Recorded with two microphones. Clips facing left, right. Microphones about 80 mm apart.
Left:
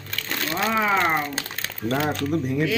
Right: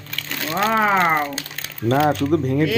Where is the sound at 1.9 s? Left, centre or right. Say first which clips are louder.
Right 6 dB; right.